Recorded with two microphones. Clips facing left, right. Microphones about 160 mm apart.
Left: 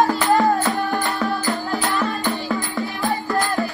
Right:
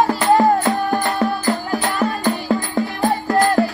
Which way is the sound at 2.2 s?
40° right (ahead or behind).